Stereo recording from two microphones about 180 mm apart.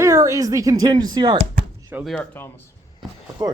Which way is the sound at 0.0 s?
15° right (ahead or behind).